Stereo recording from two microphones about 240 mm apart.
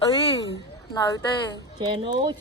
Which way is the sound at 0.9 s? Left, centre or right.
Centre.